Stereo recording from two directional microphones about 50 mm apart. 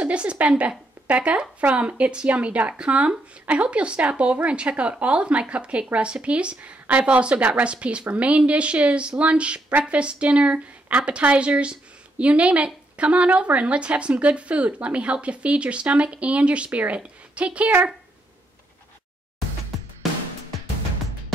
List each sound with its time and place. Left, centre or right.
0.0 s a woman's voice: right